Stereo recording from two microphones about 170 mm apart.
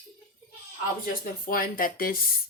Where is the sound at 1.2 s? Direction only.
55° left (ahead or behind).